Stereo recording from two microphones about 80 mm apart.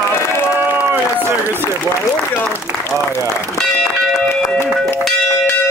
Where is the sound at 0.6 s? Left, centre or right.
Right.